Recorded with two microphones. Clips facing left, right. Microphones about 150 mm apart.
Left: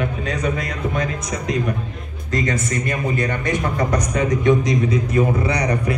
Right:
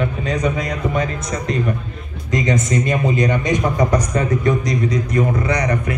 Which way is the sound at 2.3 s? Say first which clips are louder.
Right 3 dB; 20° right (ahead or behind).